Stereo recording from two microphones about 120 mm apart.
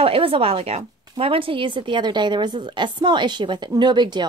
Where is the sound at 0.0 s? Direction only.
50° right (ahead or behind).